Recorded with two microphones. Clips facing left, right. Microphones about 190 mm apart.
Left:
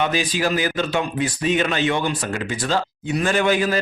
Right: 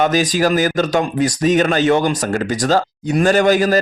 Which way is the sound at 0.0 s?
40° right (ahead or behind).